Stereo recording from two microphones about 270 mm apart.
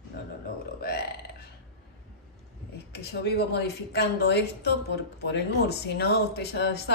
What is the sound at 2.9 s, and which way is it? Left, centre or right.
A woman's voice, left.